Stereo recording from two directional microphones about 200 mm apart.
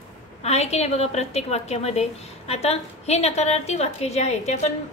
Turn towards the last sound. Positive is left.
turn(degrees=35)  # may be behind; listen again after turning